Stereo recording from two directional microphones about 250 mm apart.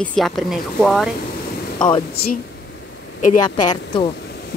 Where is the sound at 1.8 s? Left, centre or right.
Centre.